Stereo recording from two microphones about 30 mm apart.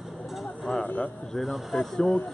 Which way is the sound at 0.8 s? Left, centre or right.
Left.